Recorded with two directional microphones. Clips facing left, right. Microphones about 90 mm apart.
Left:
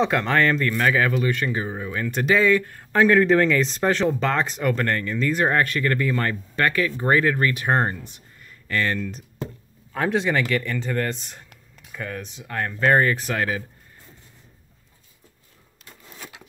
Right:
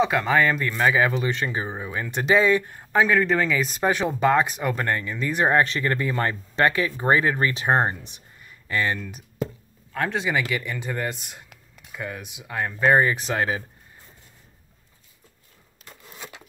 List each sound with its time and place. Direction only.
0.0 s a man's voice: 5° right (ahead or behind)
3.0 s speech: centre (ahead or behind)
9.9 s speech: centre (ahead or behind); by 13.7 s 25° right (ahead or behind)